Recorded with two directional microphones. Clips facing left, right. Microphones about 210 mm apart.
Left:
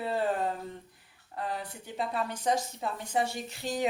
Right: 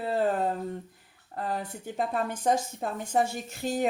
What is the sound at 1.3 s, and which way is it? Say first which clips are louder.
Speech: right 3 dB; 45° right (ahead or behind).